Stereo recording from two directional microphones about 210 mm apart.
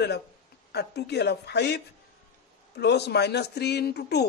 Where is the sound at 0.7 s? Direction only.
50° left (ahead or behind).